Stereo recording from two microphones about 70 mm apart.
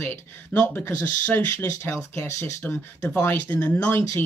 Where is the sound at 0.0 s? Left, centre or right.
Left.